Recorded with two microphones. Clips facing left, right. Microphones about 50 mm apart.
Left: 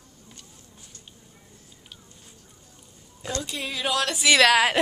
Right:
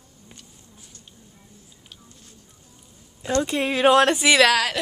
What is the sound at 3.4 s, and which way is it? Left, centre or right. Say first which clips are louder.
Speech: right 13 dB; right.